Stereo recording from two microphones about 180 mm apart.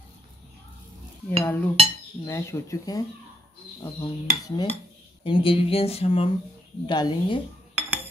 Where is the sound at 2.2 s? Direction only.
15° left (ahead or behind).